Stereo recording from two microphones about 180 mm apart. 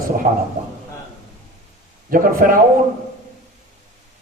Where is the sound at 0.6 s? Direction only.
40° right (ahead or behind).